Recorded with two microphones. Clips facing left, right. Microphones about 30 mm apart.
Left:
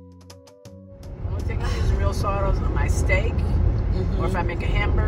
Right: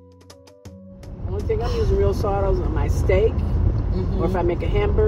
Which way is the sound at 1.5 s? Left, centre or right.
Left.